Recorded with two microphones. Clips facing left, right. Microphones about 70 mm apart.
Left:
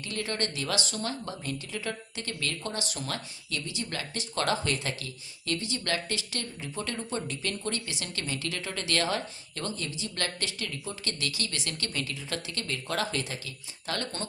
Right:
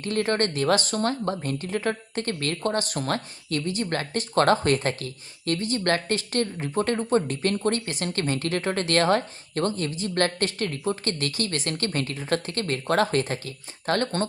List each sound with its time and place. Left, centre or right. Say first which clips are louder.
0.0 s speech: right 9 dB; right